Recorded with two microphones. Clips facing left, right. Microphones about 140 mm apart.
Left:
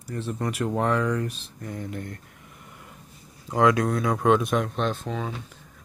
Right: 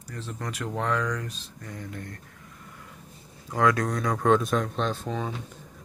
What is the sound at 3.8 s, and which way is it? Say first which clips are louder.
Speech: left 2 dB; 10° left (ahead or behind).